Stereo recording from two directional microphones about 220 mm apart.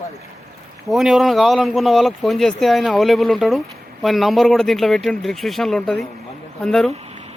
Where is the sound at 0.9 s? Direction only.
Centre (ahead or behind).